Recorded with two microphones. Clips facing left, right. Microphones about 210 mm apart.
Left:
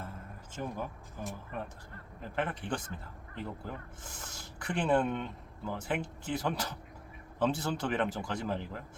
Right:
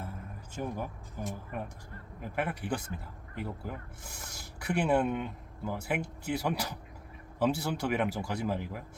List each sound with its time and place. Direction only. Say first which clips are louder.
0.5 s speech: right 2 dB; 15° right (ahead or behind)